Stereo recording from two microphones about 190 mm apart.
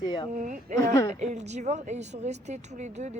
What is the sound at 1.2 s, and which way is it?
Speech, 35° right (ahead or behind).